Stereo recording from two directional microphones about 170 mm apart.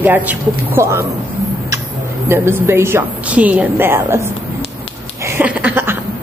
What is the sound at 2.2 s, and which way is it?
Speech, 15° right (ahead or behind).